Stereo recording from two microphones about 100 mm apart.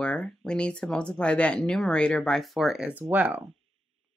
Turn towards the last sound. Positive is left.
turn(degrees=-15)  # may be behind; listen again after turning